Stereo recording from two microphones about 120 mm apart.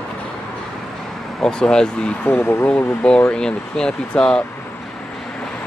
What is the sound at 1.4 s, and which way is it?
Speech, 5° left (ahead or behind).